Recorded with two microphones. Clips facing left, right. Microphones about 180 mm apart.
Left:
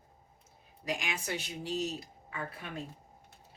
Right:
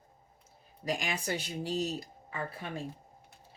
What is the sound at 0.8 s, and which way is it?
Speech, 35° right (ahead or behind).